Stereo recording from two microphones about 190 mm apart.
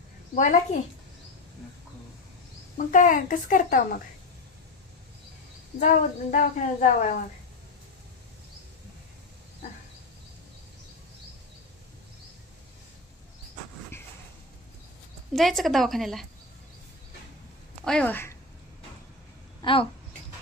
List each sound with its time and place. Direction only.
0.3 s a woman's voice: 40° left (ahead or behind)
2.9 s speech: 45° left (ahead or behind)
5.8 s speech: 40° left (ahead or behind)
15.3 s speech: centre (ahead or behind)
17.8 s a woman's voice: 5° left (ahead or behind)
19.6 s speech: 30° left (ahead or behind)